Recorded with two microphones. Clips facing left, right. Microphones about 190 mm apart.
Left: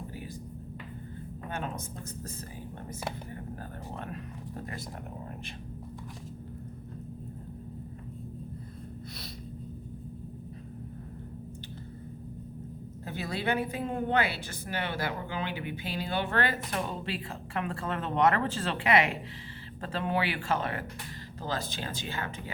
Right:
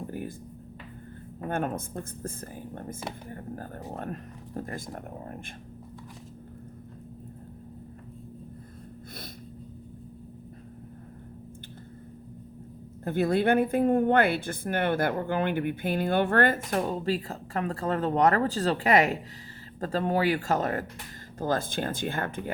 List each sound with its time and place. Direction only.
1.5 s a woman's voice: 50° right (ahead or behind)
13.1 s a woman's voice: 55° right (ahead or behind)